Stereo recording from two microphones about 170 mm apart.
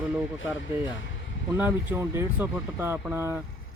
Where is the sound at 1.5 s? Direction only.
10° right (ahead or behind).